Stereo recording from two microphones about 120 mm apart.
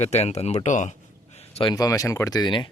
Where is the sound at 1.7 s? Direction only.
30° left (ahead or behind).